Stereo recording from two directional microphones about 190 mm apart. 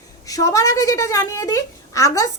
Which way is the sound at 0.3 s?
20° left (ahead or behind).